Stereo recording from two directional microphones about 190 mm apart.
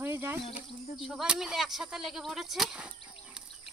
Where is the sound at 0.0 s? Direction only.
10° right (ahead or behind).